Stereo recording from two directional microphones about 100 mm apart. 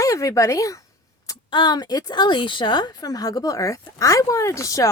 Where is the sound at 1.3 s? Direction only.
45° left (ahead or behind).